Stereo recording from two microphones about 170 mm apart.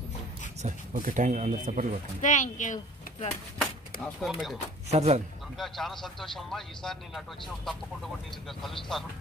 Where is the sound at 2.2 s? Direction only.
50° left (ahead or behind).